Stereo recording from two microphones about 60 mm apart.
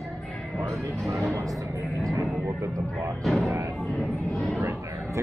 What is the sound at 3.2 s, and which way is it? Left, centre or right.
Speech, centre.